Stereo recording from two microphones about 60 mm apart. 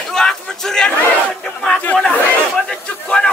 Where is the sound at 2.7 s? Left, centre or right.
Centre.